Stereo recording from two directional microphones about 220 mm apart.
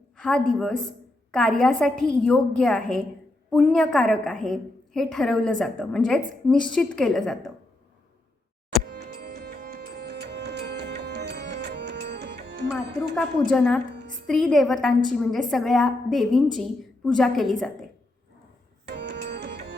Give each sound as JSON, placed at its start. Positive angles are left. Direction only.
{"t": 0.2, "sound": "a woman's voice", "side_deg": 5}
{"t": 8.8, "sound": "music", "side_deg": -45}
{"t": 13.1, "sound": "a woman's voice", "side_deg": 5}
{"t": 18.9, "sound": "music", "side_deg": -50}